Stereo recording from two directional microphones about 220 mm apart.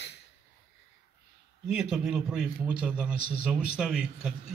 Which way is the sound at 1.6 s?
Centre (ahead or behind).